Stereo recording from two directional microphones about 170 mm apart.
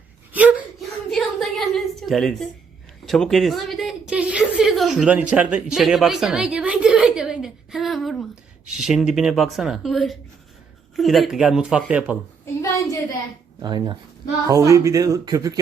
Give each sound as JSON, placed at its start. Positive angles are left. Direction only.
{"t": 0.3, "sound": "whimper", "side_deg": -10}
{"t": 1.1, "sound": "a sound", "side_deg": 0}
{"t": 5.3, "sound": "a woman's voice", "side_deg": -5}
{"t": 13.6, "sound": "speech", "side_deg": -25}